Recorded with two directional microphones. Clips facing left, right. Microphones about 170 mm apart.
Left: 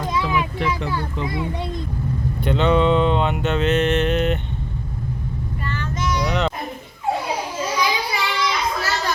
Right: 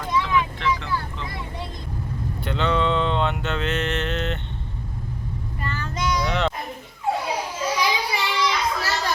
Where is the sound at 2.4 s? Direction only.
20° left (ahead or behind).